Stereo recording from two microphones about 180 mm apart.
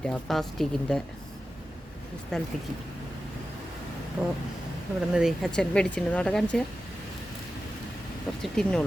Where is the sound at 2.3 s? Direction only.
5° left (ahead or behind).